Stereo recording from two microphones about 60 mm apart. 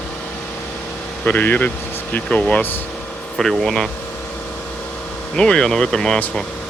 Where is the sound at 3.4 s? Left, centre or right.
Centre.